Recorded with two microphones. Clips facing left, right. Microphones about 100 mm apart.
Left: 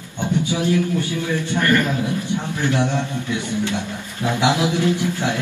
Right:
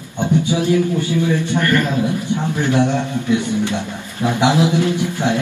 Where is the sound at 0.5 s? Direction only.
20° right (ahead or behind).